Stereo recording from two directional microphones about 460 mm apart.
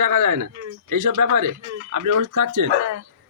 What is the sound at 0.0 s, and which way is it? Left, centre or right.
Speech, right.